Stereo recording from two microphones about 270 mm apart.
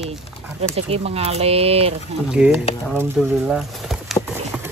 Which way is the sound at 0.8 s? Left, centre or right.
Right.